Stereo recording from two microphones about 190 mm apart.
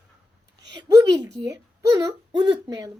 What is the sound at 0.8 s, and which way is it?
A child's voice, 20° right (ahead or behind).